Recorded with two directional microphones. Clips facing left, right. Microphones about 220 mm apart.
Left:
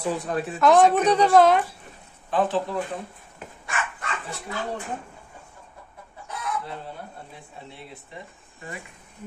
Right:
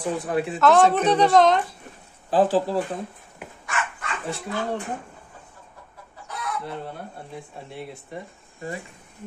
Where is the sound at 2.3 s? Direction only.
30° right (ahead or behind).